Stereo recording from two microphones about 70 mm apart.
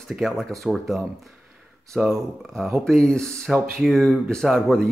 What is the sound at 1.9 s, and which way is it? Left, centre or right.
Speech, centre.